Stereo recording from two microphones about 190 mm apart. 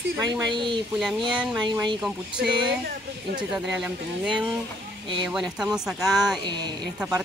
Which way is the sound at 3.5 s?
5° right (ahead or behind).